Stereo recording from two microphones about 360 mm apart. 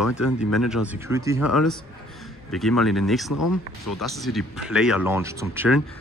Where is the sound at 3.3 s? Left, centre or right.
Left.